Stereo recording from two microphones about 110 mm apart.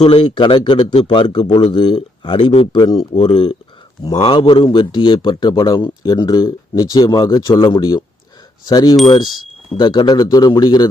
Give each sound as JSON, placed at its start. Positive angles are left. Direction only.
{"t": 0.0, "sound": "speech", "side_deg": 55}